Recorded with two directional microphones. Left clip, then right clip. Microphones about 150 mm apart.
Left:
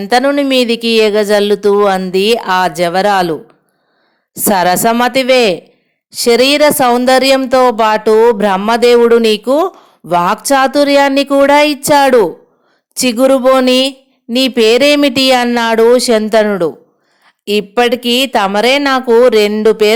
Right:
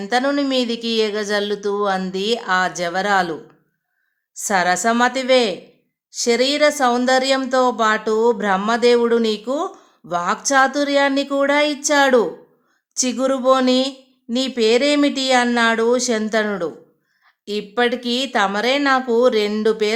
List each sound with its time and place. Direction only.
0.3 s speech: 45° left (ahead or behind)
4.4 s speech: 45° left (ahead or behind)
17.2 s speech: 45° left (ahead or behind)